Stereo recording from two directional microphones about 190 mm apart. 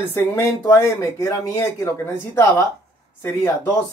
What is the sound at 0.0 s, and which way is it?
Speech, 15° left (ahead or behind).